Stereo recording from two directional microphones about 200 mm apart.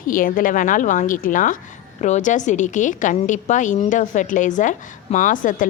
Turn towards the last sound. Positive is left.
turn(degrees=40)  # may be behind; listen again after turning